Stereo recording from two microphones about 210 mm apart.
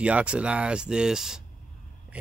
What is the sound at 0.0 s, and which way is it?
Speech, 5° right (ahead or behind).